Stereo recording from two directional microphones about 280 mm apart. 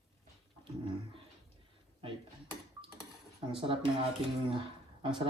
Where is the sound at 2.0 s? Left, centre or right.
Centre.